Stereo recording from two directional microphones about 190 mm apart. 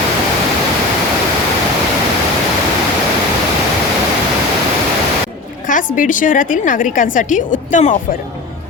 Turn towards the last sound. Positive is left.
turn(degrees=40)  # may be behind; listen again after turning